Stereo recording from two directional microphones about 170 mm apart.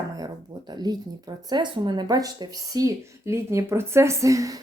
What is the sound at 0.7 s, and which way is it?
Speech, 25° right (ahead or behind).